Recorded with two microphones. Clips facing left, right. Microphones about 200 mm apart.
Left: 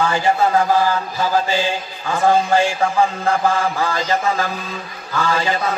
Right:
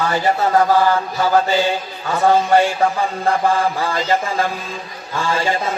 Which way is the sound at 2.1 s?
40° right (ahead or behind).